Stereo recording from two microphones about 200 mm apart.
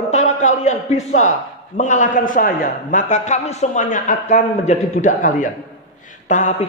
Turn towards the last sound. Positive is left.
turn(degrees=35)  # may be behind; listen again after turning